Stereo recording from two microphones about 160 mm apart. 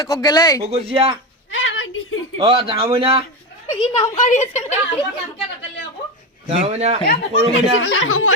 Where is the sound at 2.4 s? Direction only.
35° right (ahead or behind).